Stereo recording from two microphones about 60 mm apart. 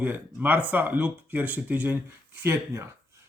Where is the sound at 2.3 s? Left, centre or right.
Right.